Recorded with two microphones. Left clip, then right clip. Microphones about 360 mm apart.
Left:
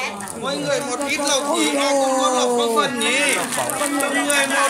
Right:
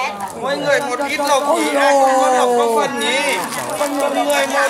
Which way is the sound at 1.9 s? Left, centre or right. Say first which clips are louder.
Right 8 dB; right.